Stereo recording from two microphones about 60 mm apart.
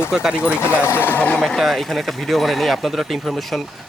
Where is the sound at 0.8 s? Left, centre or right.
Left.